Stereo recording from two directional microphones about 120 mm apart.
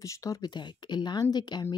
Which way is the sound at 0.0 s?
25° left (ahead or behind).